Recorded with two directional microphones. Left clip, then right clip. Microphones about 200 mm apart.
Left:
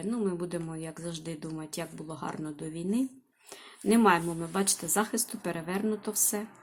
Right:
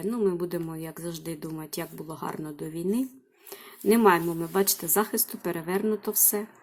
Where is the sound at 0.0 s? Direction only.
10° right (ahead or behind).